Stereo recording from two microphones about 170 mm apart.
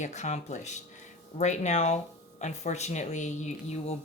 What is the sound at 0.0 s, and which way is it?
Speech, 45° left (ahead or behind).